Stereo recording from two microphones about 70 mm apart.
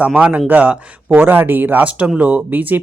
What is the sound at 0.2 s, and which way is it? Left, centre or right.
Speech, centre.